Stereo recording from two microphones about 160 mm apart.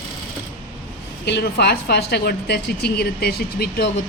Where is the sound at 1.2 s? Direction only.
90° left.